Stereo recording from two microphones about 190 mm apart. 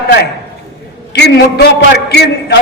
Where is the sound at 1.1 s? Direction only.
60° left (ahead or behind).